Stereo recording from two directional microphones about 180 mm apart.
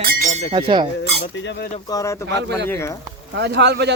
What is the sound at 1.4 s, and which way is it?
Speech, 80° left.